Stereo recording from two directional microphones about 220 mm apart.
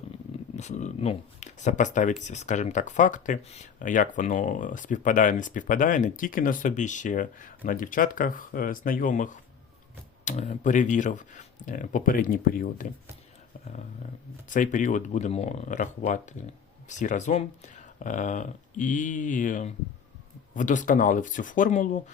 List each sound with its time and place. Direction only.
0.5 s speech: 30° left (ahead or behind)
14.5 s speech: 35° left (ahead or behind)